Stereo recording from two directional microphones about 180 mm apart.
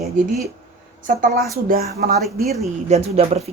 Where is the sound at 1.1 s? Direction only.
50° right (ahead or behind).